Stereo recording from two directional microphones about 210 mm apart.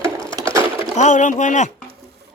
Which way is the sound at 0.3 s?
15° right (ahead or behind).